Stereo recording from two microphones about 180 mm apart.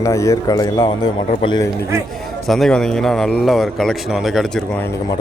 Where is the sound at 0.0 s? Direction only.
15° left (ahead or behind).